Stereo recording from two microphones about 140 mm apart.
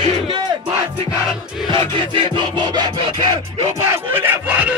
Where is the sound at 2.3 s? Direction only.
30° right (ahead or behind).